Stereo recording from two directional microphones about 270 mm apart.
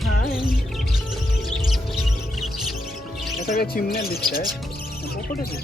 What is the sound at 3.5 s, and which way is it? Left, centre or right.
Speech, left.